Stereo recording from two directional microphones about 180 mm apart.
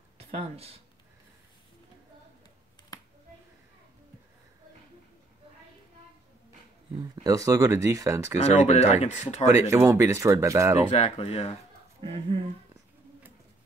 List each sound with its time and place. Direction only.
0.2 s speech: 35° right (ahead or behind)
6.9 s speech: 20° right (ahead or behind)
8.5 s speech: 40° left (ahead or behind)
9.5 s speech: 15° right (ahead or behind)
10.9 s speech: 35° left (ahead or behind)
12.0 s speech: 30° right (ahead or behind)